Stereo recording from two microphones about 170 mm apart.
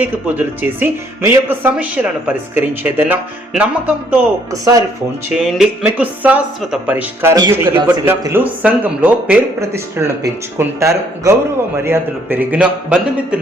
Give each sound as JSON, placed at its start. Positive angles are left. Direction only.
{"t": 0.0, "sound": "speech", "side_deg": -10}
{"t": 4.5, "sound": "speech", "side_deg": -20}
{"t": 5.3, "sound": "speech", "side_deg": -5}